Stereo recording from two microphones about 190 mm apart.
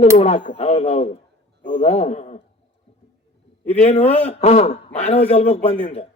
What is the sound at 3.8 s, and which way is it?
A man's voice, 30° left (ahead or behind).